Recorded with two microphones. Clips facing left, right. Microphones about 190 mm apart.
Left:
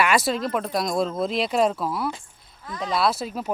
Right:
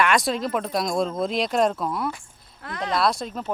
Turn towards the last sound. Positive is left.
turn(degrees=5)  # may be behind; listen again after turning